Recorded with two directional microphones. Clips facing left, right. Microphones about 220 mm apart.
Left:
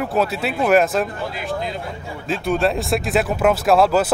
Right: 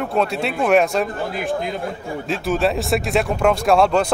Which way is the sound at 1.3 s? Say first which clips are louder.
Right 3 dB; 50° right (ahead or behind).